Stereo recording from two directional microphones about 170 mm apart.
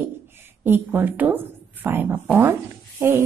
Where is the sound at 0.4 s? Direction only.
10° right (ahead or behind).